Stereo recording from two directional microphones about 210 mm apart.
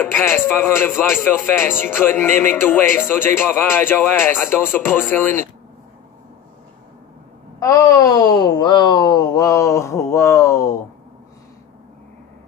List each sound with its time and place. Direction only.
0.0 s speech: 10° left (ahead or behind)
7.6 s speech: 15° left (ahead or behind)